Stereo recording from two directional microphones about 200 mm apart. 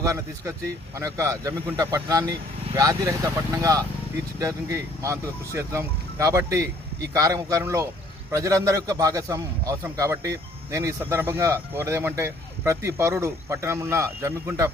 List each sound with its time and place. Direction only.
0.0 s a man's voice: 15° right (ahead or behind)